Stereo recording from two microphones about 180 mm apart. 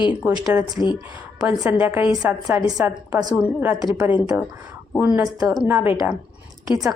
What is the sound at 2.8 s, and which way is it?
Speech, 20° right (ahead or behind).